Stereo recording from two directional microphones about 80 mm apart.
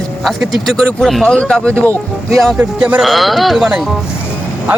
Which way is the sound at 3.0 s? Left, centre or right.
Centre.